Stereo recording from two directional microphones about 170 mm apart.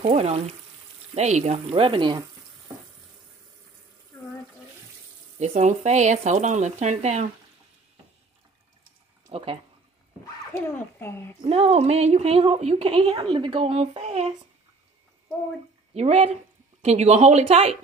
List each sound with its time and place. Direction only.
0.0 s speech: 40° right (ahead or behind)
5.4 s speech: 45° right (ahead or behind)
9.3 s speech: 35° right (ahead or behind)
10.5 s speech: 10° left (ahead or behind)
11.4 s speech: 35° right (ahead or behind)
15.9 s speech: 40° right (ahead or behind)